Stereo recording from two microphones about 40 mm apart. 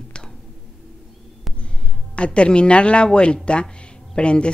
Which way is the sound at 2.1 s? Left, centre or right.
Left.